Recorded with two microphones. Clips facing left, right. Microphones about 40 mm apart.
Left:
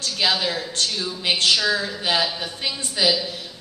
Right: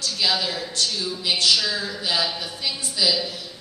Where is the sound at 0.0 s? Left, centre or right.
Left.